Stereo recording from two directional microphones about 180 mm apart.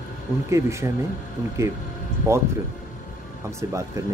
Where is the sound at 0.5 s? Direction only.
15° right (ahead or behind).